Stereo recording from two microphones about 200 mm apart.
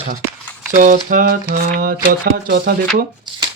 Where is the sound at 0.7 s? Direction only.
40° right (ahead or behind).